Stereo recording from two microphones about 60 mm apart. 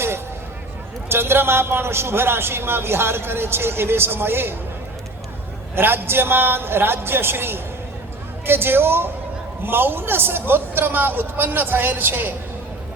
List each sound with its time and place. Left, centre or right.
1.1 s a man's voice: right
5.7 s a man's voice: right